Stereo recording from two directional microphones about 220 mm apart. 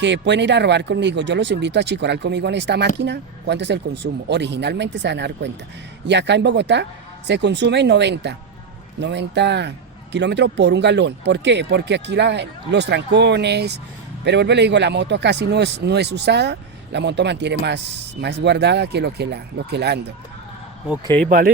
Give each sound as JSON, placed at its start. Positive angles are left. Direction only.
{"t": 0.0, "sound": "speech", "side_deg": -55}
{"t": 21.2, "sound": "speech", "side_deg": -40}